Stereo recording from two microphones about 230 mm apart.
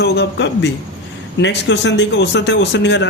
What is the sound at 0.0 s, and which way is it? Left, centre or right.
Speech, left.